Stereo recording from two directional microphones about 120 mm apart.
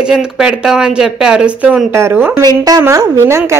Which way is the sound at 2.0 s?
20° right (ahead or behind).